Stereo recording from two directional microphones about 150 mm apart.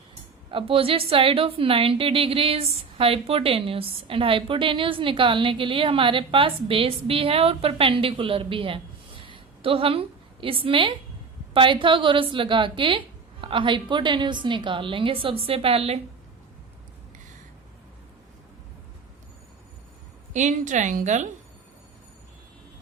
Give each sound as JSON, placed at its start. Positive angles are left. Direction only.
{"t": 0.5, "sound": "a woman's voice", "side_deg": -40}
{"t": 20.3, "sound": "a woman's voice", "side_deg": -55}